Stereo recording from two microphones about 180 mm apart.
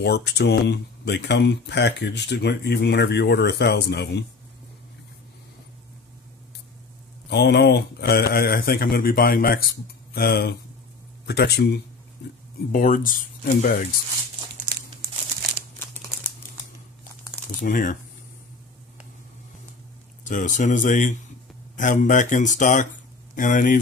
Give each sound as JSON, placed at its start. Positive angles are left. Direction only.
{"t": 0.0, "sound": "speech", "side_deg": 65}
{"t": 7.2, "sound": "a man's voice", "side_deg": 70}
{"t": 12.7, "sound": "speech", "side_deg": 50}
{"t": 17.6, "sound": "speech", "side_deg": 45}
{"t": 20.2, "sound": "speech", "side_deg": 45}